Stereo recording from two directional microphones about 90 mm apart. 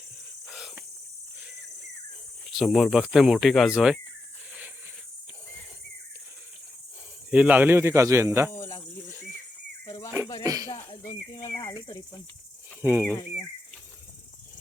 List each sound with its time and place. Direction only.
0.4 s cricket: 10° right (ahead or behind)
2.5 s speech: centre (ahead or behind)
3.7 s speech: 10° right (ahead or behind)
7.3 s speech: 15° right (ahead or behind); by 8.4 s 30° right (ahead or behind)
8.4 s cricket: 30° left (ahead or behind)
9.8 s cricket: 35° left (ahead or behind)
10.4 s a sound: 40° right (ahead or behind)
11.3 s cricket: 30° left (ahead or behind)
12.8 s speech: 25° right (ahead or behind)